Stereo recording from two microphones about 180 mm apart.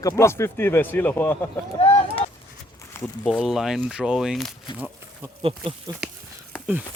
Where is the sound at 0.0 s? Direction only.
15° left (ahead or behind).